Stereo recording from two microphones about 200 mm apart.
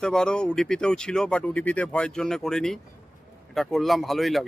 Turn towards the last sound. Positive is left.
turn(degrees=0)  # may be behind; listen again after turning